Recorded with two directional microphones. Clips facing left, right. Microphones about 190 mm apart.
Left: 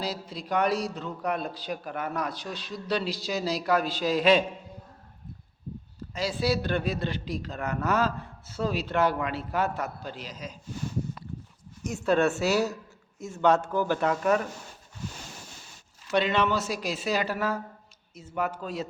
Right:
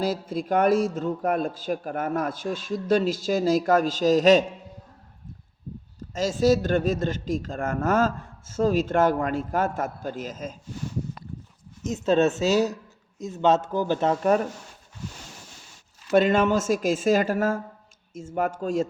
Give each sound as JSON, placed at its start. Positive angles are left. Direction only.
{"t": 0.0, "sound": "a man's voice", "side_deg": -50}
{"t": 6.1, "sound": "a man's voice", "side_deg": -45}
{"t": 11.8, "sound": "speech", "side_deg": -20}
{"t": 16.1, "sound": "a man's voice", "side_deg": -45}